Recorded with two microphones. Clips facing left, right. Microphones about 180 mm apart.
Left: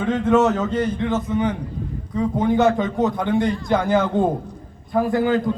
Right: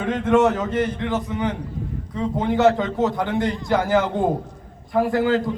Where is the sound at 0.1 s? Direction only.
20° right (ahead or behind).